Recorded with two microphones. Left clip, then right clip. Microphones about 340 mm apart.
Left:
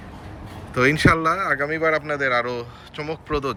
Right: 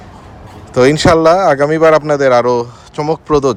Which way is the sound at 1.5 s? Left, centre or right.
Right.